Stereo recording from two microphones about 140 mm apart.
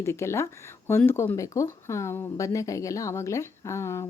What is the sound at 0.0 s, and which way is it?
Speech, 20° left (ahead or behind).